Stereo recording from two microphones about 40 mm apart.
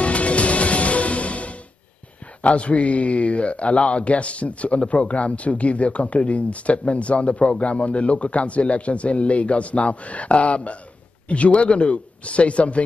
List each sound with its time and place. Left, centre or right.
0.0 s music: left
2.4 s a man's voice: left